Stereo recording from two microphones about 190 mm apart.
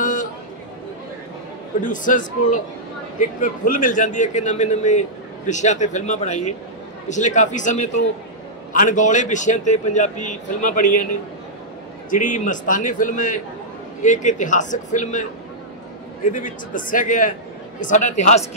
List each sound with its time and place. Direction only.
0.0 s a sound: 40° left (ahead or behind)
1.8 s a man's voice: 45° left (ahead or behind)
12.1 s a man's voice: 45° left (ahead or behind)
16.3 s a man's voice: 45° left (ahead or behind)